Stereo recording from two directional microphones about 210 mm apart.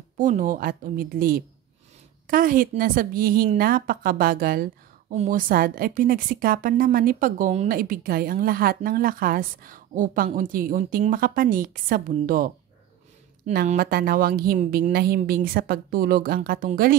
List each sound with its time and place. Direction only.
0.2 s a woman's voice: 40° right (ahead or behind)
13.5 s a woman's voice: 45° right (ahead or behind)